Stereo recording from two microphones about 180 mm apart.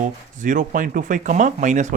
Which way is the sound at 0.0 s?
45° right (ahead or behind).